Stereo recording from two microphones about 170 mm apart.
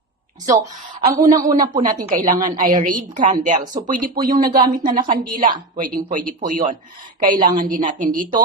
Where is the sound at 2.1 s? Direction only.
50° right (ahead or behind).